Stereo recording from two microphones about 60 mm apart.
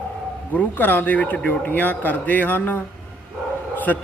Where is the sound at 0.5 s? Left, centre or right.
Left.